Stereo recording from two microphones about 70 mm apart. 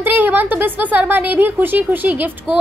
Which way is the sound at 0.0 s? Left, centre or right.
Right.